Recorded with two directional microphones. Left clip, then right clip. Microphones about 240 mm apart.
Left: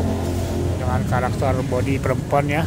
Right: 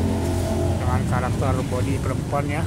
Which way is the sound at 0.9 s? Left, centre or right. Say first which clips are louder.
Left 3 dB; centre.